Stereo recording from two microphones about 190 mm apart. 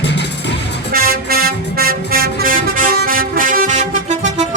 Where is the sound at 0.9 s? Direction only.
50° right (ahead or behind).